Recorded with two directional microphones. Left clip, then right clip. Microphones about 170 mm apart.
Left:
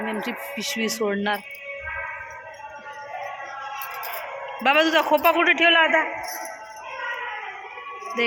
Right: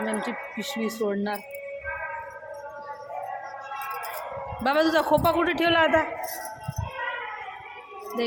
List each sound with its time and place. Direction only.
0.0 s speech: centre (ahead or behind)
4.6 s a man's voice: 15° right (ahead or behind)
5.6 s a man's voice: 30° right (ahead or behind)